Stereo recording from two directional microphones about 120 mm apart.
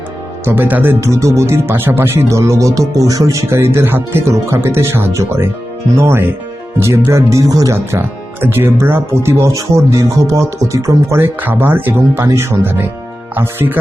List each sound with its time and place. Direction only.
0.4 s speech: 15° right (ahead or behind)